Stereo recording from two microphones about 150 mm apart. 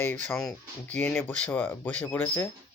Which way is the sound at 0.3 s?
5° left (ahead or behind).